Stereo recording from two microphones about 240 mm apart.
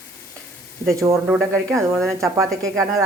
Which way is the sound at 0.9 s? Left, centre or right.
Centre.